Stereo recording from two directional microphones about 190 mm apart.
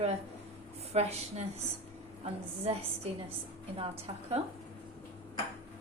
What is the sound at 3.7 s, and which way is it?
Speech, 30° right (ahead or behind).